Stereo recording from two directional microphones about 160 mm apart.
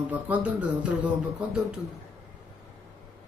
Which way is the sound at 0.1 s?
10° right (ahead or behind).